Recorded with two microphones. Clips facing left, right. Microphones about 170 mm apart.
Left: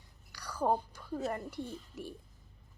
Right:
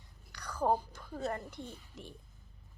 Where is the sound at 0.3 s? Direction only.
10° left (ahead or behind).